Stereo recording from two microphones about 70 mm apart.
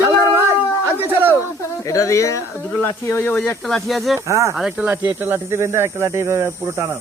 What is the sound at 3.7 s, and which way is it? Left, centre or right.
Speech, centre.